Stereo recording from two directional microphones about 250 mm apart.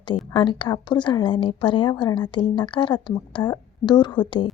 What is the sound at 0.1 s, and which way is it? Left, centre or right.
A woman's voice, centre.